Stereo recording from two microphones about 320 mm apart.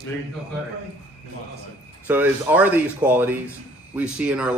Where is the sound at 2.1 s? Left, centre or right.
Centre.